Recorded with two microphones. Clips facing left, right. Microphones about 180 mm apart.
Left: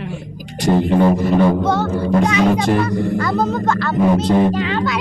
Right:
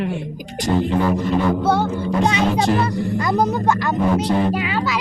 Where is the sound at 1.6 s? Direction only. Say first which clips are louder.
Even; 10° right (ahead or behind).